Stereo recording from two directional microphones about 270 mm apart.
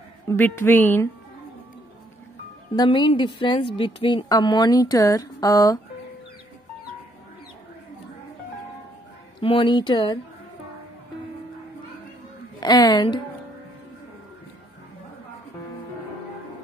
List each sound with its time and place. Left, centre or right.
0.3 s a woman's voice: centre
2.7 s a woman's voice: centre
9.4 s a woman's voice: centre
12.5 s a woman's voice: centre